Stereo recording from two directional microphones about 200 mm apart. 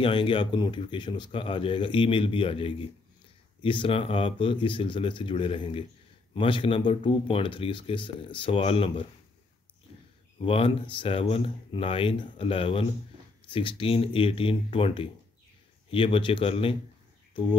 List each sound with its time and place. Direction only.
0.0 s speech: 25° left (ahead or behind)
10.4 s speech: 25° left (ahead or behind)
17.3 s a sound: 25° left (ahead or behind)